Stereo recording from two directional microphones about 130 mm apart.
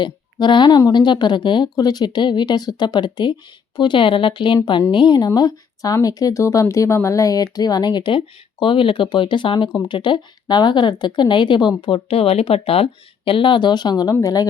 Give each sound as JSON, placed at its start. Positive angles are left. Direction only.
{"t": 0.0, "sound": "speech", "side_deg": 35}